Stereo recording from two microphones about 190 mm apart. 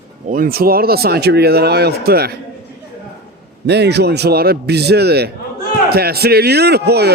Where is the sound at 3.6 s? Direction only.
60° right (ahead or behind).